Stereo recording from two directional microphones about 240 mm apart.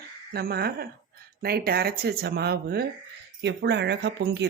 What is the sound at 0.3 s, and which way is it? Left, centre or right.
Speech, right.